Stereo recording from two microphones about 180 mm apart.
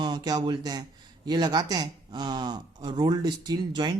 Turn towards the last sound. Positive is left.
turn(degrees=-25)  # may be behind; listen again after turning